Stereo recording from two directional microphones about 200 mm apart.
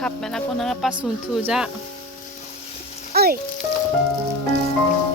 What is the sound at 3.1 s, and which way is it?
Frying, 50° right (ahead or behind).